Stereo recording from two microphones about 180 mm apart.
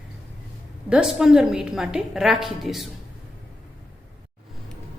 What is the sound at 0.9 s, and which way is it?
A woman's voice, 5° right (ahead or behind).